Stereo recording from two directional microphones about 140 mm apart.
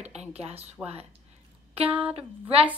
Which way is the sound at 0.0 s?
50° right (ahead or behind).